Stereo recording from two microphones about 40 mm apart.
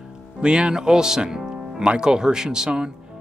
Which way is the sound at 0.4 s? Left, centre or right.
Right.